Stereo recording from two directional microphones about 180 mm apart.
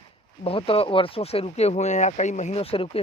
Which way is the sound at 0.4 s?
30° left (ahead or behind).